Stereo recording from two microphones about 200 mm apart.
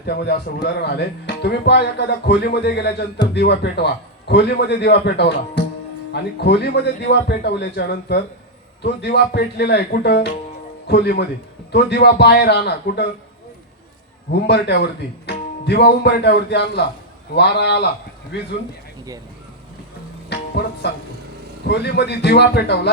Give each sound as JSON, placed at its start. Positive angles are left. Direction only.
{"t": 0.0, "sound": "speech", "side_deg": 55}
{"t": 14.3, "sound": "speech", "side_deg": 55}
{"t": 20.8, "sound": "speech", "side_deg": 55}